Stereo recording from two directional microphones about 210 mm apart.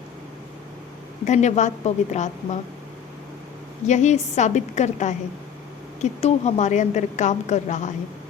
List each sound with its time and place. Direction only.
1.2 s a woman's voice: 35° left (ahead or behind)
3.8 s a woman's voice: 35° left (ahead or behind)